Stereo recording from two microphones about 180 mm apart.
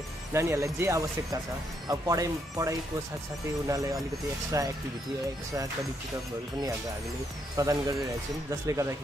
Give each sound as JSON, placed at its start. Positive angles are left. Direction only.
{"t": 0.3, "sound": "speech", "side_deg": -15}
{"t": 7.6, "sound": "speech", "side_deg": -20}